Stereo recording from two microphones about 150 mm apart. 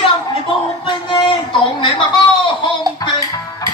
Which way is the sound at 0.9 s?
35° left (ahead or behind).